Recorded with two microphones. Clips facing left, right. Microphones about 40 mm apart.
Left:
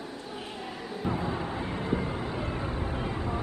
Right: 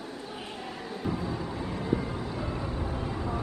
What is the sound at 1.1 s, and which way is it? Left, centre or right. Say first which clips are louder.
Vehicle: left 3 dB; left.